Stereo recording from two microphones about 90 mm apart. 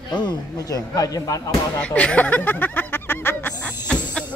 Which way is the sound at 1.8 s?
15° left (ahead or behind).